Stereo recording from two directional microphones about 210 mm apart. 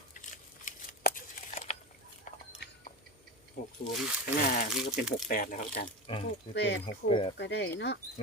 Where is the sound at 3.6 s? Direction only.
40° left (ahead or behind).